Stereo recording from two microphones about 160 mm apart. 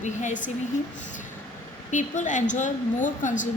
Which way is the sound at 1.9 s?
50° left (ahead or behind).